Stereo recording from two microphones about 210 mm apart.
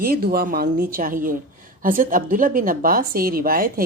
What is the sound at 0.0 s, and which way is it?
A woman's voice, 45° right (ahead or behind).